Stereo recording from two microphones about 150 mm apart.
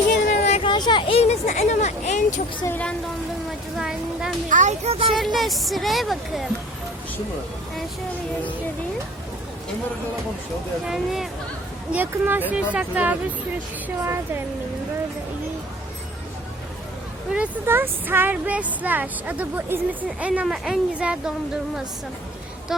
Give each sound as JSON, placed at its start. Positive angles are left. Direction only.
{"t": 0.4, "sound": "a sound", "side_deg": 45}
{"t": 0.7, "sound": "speech", "side_deg": 30}
{"t": 2.6, "sound": "speech", "side_deg": 10}
{"t": 3.8, "sound": "speech", "side_deg": -5}
{"t": 4.4, "sound": "a child's voice", "side_deg": -55}
{"t": 5.1, "sound": "speech", "side_deg": 0}
{"t": 10.8, "sound": "speech", "side_deg": 0}
{"t": 17.3, "sound": "speech", "side_deg": -10}